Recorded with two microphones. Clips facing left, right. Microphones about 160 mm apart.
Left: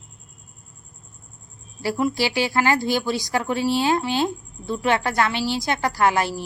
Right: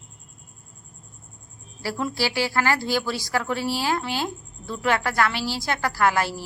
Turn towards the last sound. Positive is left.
turn(degrees=20)  # may be behind; listen again after turning